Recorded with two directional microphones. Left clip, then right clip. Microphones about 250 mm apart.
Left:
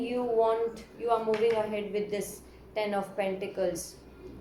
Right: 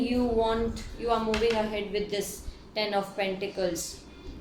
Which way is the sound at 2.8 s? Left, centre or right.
Right.